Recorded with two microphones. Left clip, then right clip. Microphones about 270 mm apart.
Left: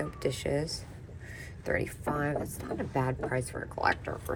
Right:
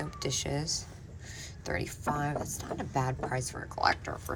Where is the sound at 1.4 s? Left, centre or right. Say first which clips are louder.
Left 4 dB; centre.